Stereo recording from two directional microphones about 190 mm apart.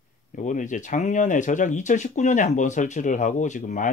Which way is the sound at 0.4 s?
40° left (ahead or behind).